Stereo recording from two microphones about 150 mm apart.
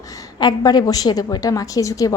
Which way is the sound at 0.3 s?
25° left (ahead or behind).